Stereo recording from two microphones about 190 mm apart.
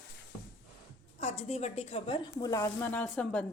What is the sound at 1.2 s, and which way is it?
A woman's voice, 35° left (ahead or behind).